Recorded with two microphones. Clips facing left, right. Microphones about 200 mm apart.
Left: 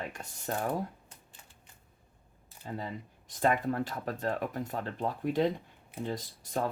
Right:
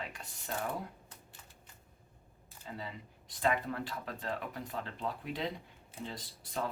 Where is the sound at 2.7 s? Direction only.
45° left (ahead or behind).